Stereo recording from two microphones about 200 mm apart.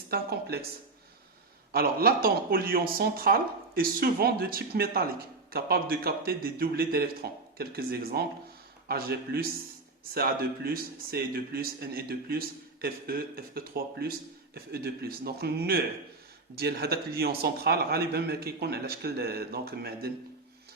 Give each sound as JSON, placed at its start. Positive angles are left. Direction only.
{"t": 0.1, "sound": "speech", "side_deg": -50}
{"t": 1.7, "sound": "speech", "side_deg": -50}